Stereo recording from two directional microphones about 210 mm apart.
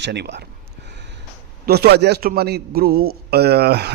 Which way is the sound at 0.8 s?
55° right (ahead or behind).